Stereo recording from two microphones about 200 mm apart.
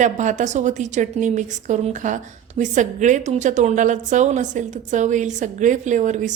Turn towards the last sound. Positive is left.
turn(degrees=-40)  # may be behind; listen again after turning